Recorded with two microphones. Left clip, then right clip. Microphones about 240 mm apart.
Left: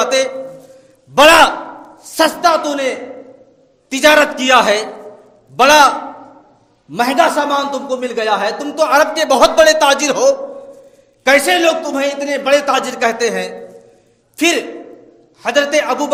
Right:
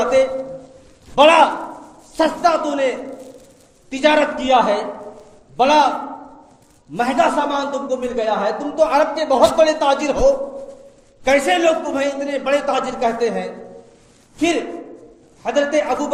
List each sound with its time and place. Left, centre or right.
0.0 s a sound: left
1.1 s a man's voice: left
6.9 s a man's voice: left